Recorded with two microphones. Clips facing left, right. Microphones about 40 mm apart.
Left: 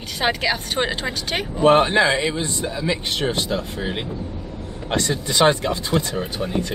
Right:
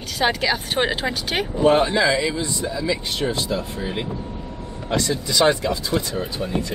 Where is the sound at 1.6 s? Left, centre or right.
Left.